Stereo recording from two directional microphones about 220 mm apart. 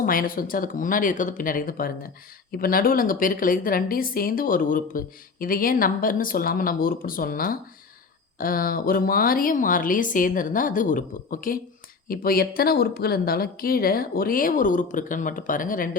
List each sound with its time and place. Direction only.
0.0 s a woman's voice: 40° left (ahead or behind)